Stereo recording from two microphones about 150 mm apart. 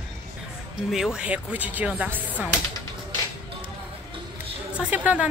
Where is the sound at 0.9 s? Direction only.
5° right (ahead or behind).